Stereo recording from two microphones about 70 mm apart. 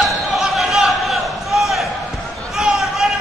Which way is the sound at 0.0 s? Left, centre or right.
Centre.